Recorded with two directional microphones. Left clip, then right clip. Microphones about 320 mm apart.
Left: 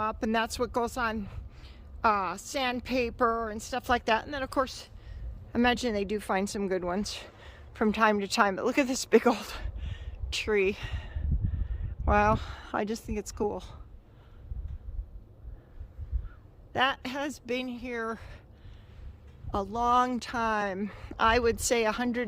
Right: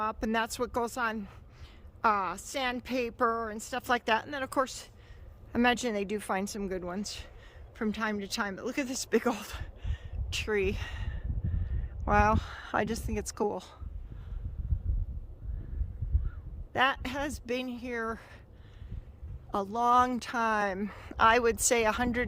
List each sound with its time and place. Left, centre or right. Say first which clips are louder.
0.0 s a woman's voice: left 2 dB; centre
16.7 s a woman's voice: even; centre
19.5 s a woman's voice: even; centre